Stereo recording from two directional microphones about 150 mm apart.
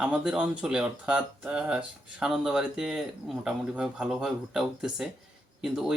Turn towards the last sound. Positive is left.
turn(degrees=-5)  # may be behind; listen again after turning